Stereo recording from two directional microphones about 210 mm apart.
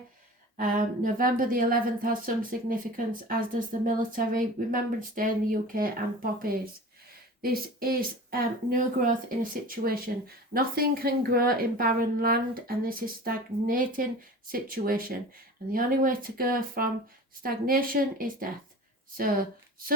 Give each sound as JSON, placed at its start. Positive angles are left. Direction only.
{"t": 0.5, "sound": "speech", "side_deg": -40}